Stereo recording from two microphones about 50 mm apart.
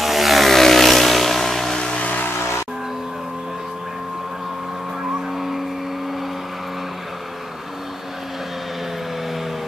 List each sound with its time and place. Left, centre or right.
0.0 s vehicle: centre
2.0 s vehicle: left